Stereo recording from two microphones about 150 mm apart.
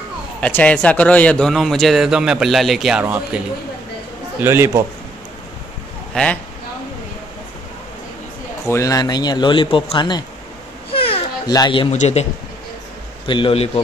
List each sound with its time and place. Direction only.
0.4 s a man's voice: 10° left (ahead or behind); by 3.2 s 5° right (ahead or behind)
4.4 s a man's voice: 15° right (ahead or behind)
6.1 s speech: 5° left (ahead or behind)
8.6 s speech: 20° left (ahead or behind)
10.9 s a sound: 35° left (ahead or behind)
11.5 s a man's voice: 30° left (ahead or behind)
11.9 s a man's voice: 45° left (ahead or behind)
13.3 s a man's voice: 35° left (ahead or behind)